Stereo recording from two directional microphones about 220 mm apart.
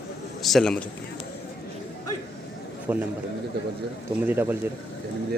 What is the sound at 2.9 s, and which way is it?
Speech, 10° right (ahead or behind).